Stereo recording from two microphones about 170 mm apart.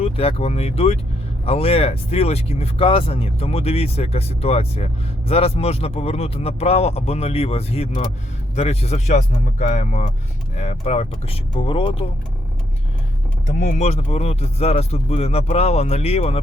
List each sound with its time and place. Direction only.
0.0 s speech: 35° left (ahead or behind)
13.7 s speech: 40° left (ahead or behind)